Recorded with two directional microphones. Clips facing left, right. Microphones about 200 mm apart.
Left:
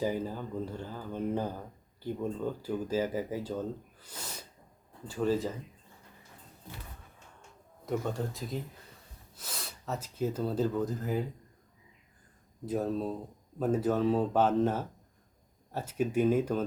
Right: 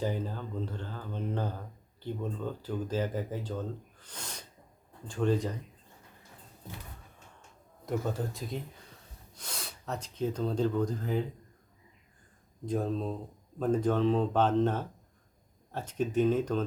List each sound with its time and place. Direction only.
0.0 s speech: 10° left (ahead or behind)
7.9 s speech: centre (ahead or behind)
12.6 s speech: 5° left (ahead or behind)